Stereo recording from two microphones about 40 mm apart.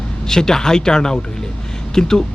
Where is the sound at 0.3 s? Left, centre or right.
Centre.